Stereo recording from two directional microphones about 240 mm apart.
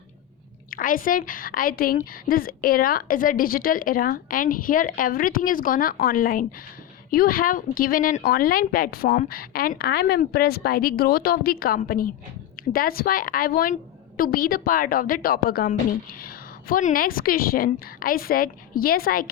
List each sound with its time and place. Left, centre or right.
0.7 s a woman's voice: left